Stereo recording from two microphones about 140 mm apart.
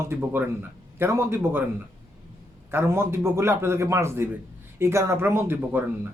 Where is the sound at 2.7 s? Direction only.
15° right (ahead or behind).